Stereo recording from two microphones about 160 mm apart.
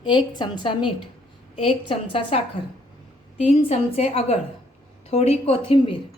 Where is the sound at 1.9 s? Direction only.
35° left (ahead or behind).